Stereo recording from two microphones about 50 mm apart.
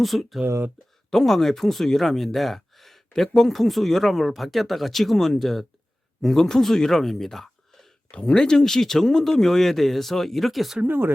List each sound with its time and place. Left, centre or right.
0.0 s speech: centre
10.8 s speech: right